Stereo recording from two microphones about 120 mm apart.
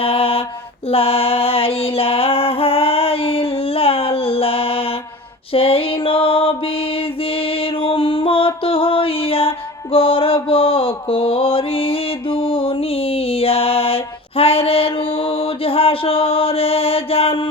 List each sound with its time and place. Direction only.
0.0 s mantra: 50° left (ahead or behind)
0.9 s music: 55° left (ahead or behind)
5.5 s mantra: 50° left (ahead or behind)